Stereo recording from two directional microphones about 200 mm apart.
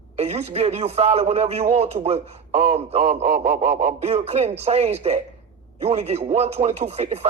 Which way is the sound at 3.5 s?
55° right (ahead or behind).